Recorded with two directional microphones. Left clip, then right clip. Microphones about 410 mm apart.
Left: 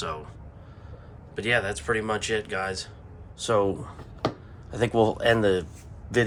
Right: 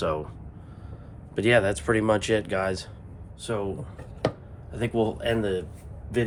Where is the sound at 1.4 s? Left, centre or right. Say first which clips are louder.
Right 4 dB; centre.